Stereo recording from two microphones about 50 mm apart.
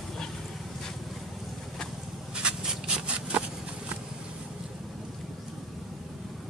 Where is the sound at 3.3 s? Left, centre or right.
Right.